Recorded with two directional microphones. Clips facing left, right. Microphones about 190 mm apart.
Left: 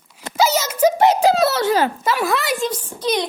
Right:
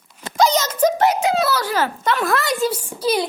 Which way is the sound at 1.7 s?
15° left (ahead or behind).